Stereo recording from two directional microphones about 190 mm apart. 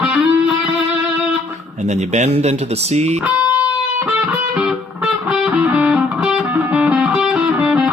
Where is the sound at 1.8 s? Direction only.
35° right (ahead or behind).